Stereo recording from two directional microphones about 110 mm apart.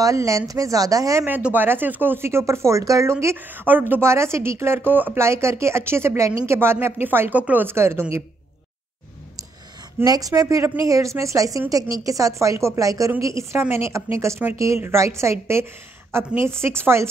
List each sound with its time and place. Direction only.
0.0 s a woman's voice: 30° right (ahead or behind)
1.2 s speech: 15° right (ahead or behind)
10.0 s a woman's voice: 35° right (ahead or behind)